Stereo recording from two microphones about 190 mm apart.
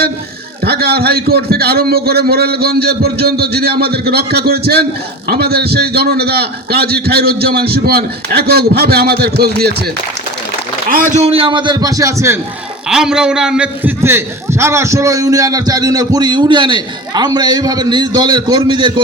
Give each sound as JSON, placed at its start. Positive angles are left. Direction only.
{"t": 0.6, "sound": "a man's voice", "side_deg": -55}
{"t": 10.8, "sound": "a man's voice", "side_deg": -45}
{"t": 12.9, "sound": "a man's voice", "side_deg": -5}